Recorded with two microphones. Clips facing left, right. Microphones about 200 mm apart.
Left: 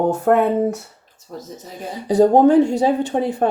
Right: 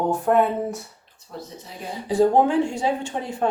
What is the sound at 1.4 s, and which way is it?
A woman's voice, 45° left (ahead or behind).